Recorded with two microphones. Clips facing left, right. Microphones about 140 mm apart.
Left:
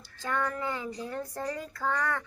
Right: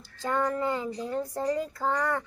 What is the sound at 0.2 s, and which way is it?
A child's voice, 25° right (ahead or behind).